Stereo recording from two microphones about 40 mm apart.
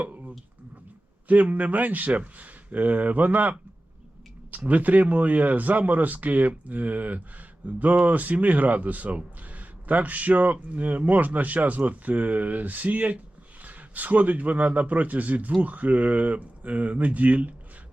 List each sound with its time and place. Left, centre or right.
0.0 s a sound: right
1.3 s speech: right
4.5 s speech: right